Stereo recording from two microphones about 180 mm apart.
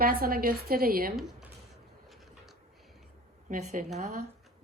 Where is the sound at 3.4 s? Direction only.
40° right (ahead or behind).